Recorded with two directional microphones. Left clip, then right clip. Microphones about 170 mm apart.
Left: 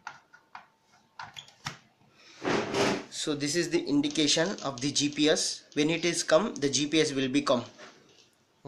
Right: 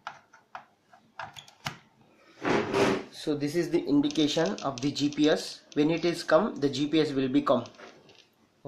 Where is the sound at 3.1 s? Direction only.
Centre (ahead or behind).